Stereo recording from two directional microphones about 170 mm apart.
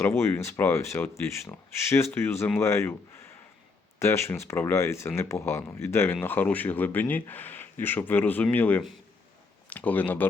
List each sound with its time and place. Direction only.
0.0 s speech: 15° left (ahead or behind)